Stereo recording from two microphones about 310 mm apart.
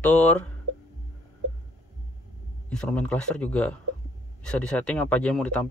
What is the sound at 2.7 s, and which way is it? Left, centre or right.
Speech, centre.